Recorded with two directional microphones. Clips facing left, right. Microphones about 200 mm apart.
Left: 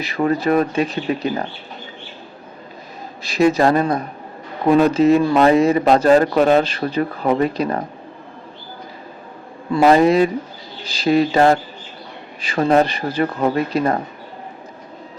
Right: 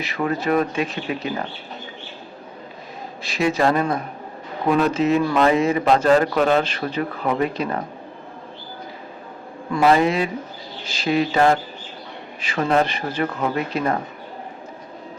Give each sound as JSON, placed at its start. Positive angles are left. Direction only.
{"t": 0.0, "sound": "speech", "side_deg": 35}
{"t": 3.2, "sound": "speech", "side_deg": 40}
{"t": 9.7, "sound": "speech", "side_deg": 40}